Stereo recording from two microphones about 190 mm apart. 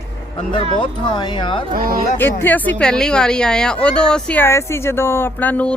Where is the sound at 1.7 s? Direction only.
50° right (ahead or behind).